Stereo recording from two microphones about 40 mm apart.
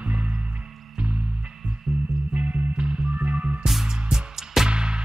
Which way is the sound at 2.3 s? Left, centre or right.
Right.